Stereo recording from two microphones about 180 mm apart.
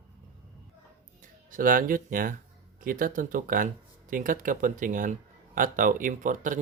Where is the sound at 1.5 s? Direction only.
50° right (ahead or behind).